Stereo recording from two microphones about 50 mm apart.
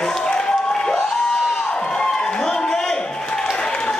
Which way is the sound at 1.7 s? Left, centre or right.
Centre.